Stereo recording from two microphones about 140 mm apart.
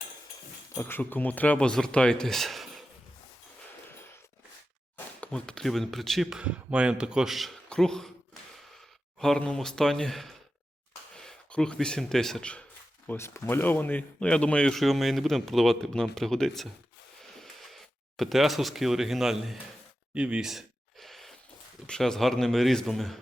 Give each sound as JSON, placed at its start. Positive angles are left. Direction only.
{"t": 0.8, "sound": "speech", "side_deg": 15}
{"t": 5.2, "sound": "speech", "side_deg": 5}
{"t": 13.1, "sound": "speech", "side_deg": 20}
{"t": 20.1, "sound": "a sound", "side_deg": -10}
{"t": 21.8, "sound": "speech", "side_deg": 5}